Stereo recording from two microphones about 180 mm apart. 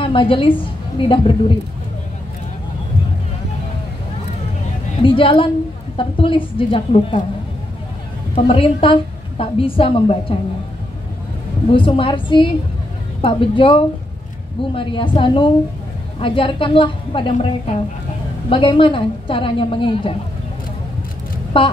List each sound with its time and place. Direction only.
0.0 s a woman's voice: 30° left (ahead or behind)
5.0 s a woman's voice: 30° left (ahead or behind)
8.4 s a woman's voice: 30° left (ahead or behind)
11.7 s a woman's voice: 30° left (ahead or behind)
21.5 s a woman's voice: 30° left (ahead or behind)